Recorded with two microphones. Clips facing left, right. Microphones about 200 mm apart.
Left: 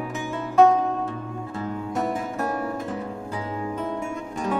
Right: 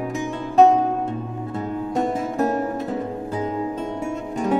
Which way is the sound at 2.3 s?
40° right (ahead or behind).